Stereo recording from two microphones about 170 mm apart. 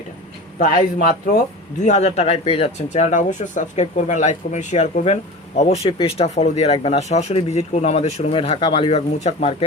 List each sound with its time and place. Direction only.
0.6 s speech: 50° left (ahead or behind)